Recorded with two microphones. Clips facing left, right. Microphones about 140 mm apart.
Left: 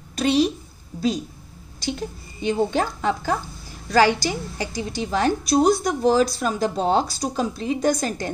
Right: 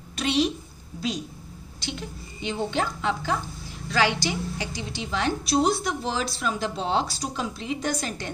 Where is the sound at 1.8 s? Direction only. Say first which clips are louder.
Left 7 dB; 40° left (ahead or behind).